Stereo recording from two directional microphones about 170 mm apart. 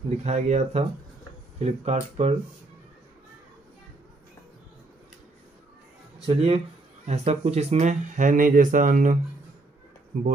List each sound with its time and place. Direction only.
0.2 s speech: 45° right (ahead or behind)
6.1 s speech: 35° right (ahead or behind)